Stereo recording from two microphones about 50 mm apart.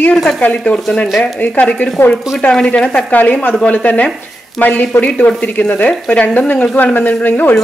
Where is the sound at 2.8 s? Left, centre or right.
Centre.